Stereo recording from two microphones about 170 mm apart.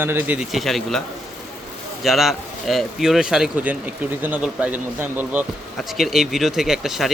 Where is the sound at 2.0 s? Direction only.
Centre (ahead or behind).